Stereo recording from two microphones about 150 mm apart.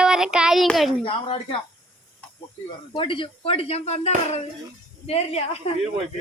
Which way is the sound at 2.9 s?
35° left (ahead or behind).